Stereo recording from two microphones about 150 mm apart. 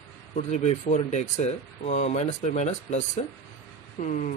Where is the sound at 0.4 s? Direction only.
50° left (ahead or behind).